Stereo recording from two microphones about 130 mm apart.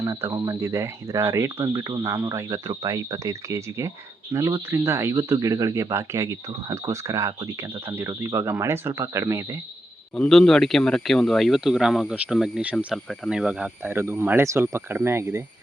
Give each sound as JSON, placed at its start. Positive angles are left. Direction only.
{"t": 0.0, "sound": "speech", "side_deg": -25}
{"t": 10.2, "sound": "speech", "side_deg": 5}